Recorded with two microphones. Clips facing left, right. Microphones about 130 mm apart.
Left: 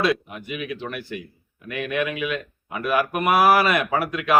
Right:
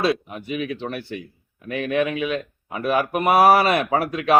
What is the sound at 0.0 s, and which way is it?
Speech, 35° right (ahead or behind).